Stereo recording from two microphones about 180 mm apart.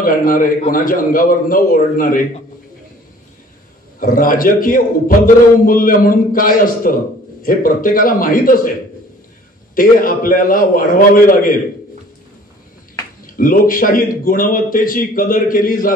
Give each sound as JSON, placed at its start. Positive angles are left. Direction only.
{"t": 0.0, "sound": "a man's voice", "side_deg": 50}
{"t": 4.0, "sound": "a man's voice", "side_deg": 50}
{"t": 9.8, "sound": "a man's voice", "side_deg": 50}
{"t": 13.2, "sound": "a man's voice", "side_deg": 50}